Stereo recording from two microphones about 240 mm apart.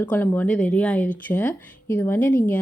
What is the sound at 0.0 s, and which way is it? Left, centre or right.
Speech, centre.